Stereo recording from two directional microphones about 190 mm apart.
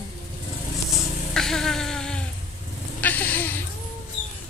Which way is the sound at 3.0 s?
10° left (ahead or behind).